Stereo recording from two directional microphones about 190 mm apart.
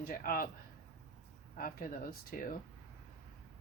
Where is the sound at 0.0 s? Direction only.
50° left (ahead or behind).